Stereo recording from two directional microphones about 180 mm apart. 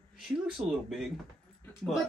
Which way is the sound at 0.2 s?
Centre (ahead or behind).